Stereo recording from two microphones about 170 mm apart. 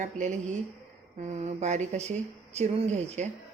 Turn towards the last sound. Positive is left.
turn(degrees=-40)  # may be behind; listen again after turning